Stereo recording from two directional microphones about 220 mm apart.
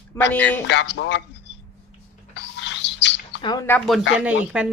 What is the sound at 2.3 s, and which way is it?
Bird, 55° left (ahead or behind).